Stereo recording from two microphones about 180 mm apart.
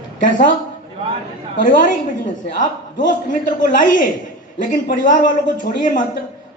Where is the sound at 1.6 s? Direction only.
45° left (ahead or behind).